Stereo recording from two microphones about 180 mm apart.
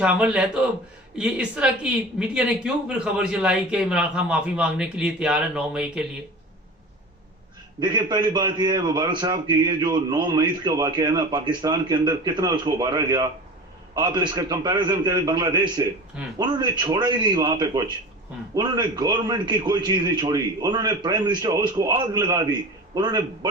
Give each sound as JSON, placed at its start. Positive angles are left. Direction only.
{"t": 0.0, "sound": "speech", "side_deg": -5}
{"t": 7.8, "sound": "a man's voice", "side_deg": -25}